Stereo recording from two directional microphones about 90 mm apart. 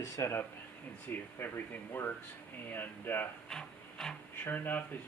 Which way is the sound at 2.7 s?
20° left (ahead or behind).